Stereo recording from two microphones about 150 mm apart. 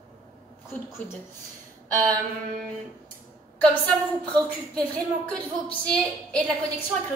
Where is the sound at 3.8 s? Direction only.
5° left (ahead or behind).